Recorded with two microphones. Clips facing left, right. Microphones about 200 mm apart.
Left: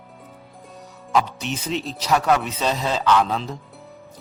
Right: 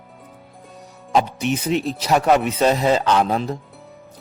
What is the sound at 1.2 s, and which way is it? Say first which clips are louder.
Speech: right 5 dB; 55° right (ahead or behind).